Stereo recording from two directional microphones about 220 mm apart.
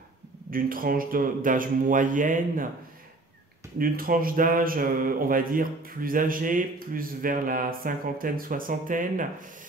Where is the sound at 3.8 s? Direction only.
40° right (ahead or behind).